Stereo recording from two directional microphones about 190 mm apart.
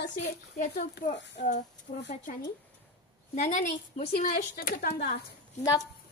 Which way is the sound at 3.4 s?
40° left (ahead or behind).